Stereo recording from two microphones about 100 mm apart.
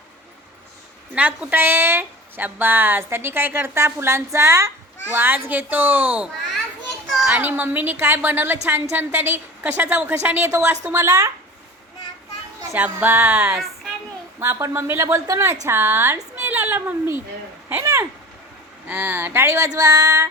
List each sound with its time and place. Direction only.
1.1 s a woman's voice: 15° right (ahead or behind)
12.7 s a woman's voice: 15° right (ahead or behind)
16.3 s a sound: 20° right (ahead or behind)
18.9 s a woman's voice: 20° right (ahead or behind); by 20.2 s 35° right (ahead or behind)